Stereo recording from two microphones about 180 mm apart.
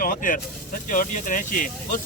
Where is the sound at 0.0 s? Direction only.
45° left (ahead or behind).